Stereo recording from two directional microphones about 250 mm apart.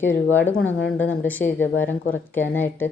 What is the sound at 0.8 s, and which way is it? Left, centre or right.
Speech, left.